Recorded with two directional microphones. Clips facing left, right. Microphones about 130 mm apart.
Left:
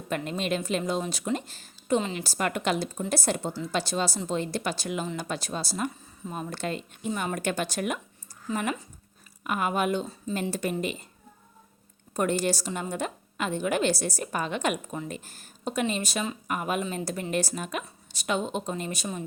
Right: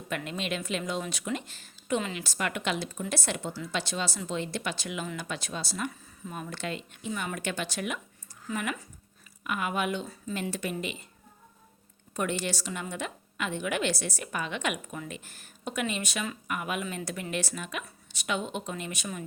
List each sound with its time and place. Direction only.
0.3 s a woman's voice: 40° left (ahead or behind)
8.4 s speech: 30° left (ahead or behind)
9.4 s a woman's voice: 40° left (ahead or behind)
12.1 s a woman's voice: 40° left (ahead or behind)